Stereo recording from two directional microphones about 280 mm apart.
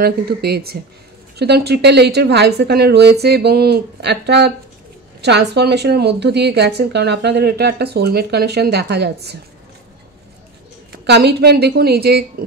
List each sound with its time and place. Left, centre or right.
0.0 s a woman's voice: right
11.1 s a woman's voice: right